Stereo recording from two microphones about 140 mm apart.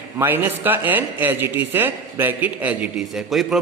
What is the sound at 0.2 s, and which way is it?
A man's voice, 15° right (ahead or behind).